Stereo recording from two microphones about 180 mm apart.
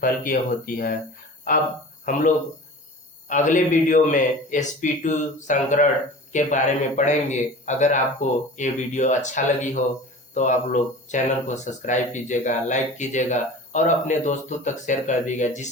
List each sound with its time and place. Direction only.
0.0 s speech: 50° left (ahead or behind)
3.2 s speech: 45° left (ahead or behind)